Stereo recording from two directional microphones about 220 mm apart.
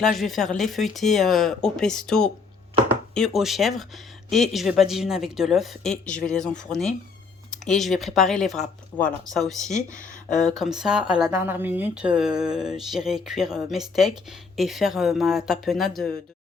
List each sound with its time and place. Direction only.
0.0 s speech: centre (ahead or behind)
9.7 s speech: 35° left (ahead or behind)
10.6 s speech: centre (ahead or behind)